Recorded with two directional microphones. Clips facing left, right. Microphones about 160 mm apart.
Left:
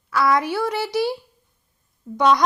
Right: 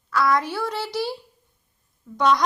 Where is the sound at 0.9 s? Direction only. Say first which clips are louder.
Left 5 dB; 60° left (ahead or behind).